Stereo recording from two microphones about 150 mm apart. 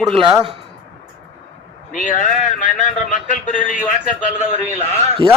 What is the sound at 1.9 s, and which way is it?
A man's voice, 55° left (ahead or behind).